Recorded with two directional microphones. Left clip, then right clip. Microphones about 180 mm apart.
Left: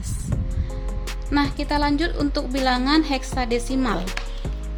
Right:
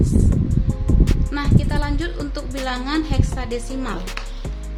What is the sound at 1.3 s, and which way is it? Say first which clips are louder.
Music: left 6 dB; 45° left (ahead or behind).